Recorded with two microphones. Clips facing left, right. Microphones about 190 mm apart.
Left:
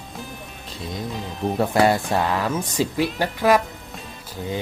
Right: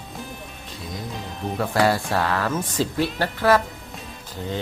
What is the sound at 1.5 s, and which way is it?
Speech, 25° left (ahead or behind).